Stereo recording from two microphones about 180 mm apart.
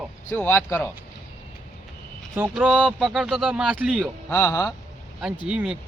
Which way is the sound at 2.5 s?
5° right (ahead or behind).